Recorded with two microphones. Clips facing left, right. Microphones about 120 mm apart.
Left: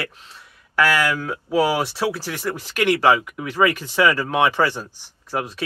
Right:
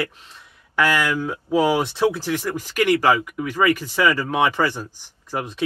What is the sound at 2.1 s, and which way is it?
Speech, 20° right (ahead or behind).